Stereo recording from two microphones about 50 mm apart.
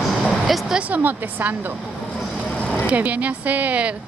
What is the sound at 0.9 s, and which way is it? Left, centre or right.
Speech, right.